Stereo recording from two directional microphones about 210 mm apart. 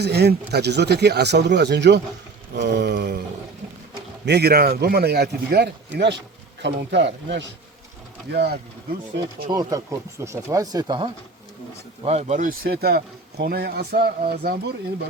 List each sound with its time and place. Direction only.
0.0 s a man's voice: 50° right (ahead or behind)
4.3 s a man's voice: 50° right (ahead or behind)
9.5 s speech: 20° right (ahead or behind)
12.0 s speech: 30° right (ahead or behind)